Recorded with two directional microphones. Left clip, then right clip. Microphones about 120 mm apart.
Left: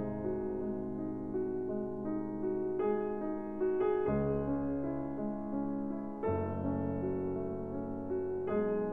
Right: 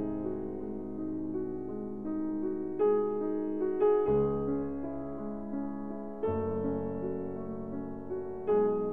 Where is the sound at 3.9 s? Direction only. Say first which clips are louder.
Right 6 dB; 5° left (ahead or behind).